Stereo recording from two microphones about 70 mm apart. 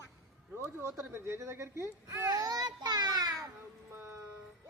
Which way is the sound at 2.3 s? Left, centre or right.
Right.